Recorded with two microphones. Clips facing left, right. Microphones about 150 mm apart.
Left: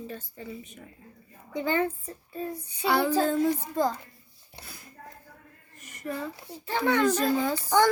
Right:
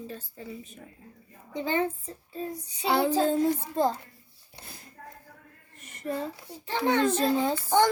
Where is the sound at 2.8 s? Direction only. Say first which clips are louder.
Even; 30° right (ahead or behind).